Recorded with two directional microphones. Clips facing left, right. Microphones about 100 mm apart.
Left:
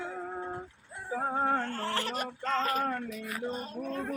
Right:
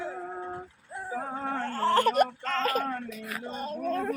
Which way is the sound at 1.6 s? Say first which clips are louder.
Right 9 dB; 35° right (ahead or behind).